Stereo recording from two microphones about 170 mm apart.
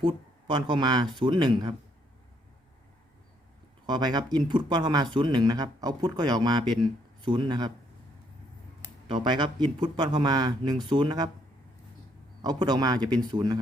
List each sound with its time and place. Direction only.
0.0 s speech: 30° right (ahead or behind)
3.8 s speech: 25° right (ahead or behind)
9.0 s speech: 25° right (ahead or behind)
12.4 s speech: 25° right (ahead or behind)